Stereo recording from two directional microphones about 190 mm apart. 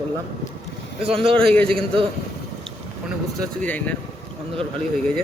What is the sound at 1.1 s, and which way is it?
Speech, 30° right (ahead or behind).